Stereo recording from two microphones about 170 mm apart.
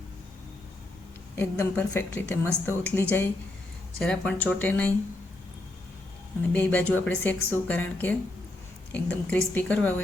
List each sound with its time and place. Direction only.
1.4 s speech: 10° left (ahead or behind)
6.5 s speech: 10° left (ahead or behind)